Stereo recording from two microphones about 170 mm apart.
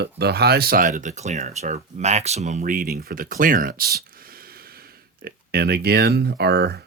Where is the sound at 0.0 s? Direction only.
70° right (ahead or behind).